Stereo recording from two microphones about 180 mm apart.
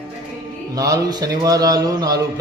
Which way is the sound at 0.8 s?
20° right (ahead or behind).